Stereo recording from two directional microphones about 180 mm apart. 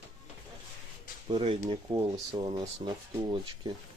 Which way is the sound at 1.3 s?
30° right (ahead or behind).